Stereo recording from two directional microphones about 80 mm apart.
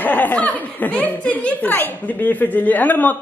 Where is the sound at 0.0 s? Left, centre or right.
Left.